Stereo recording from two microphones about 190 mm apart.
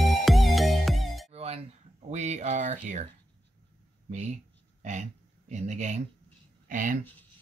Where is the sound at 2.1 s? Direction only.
35° right (ahead or behind).